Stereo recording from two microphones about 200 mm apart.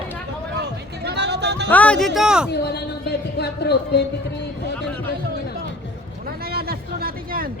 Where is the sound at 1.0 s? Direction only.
60° right (ahead or behind).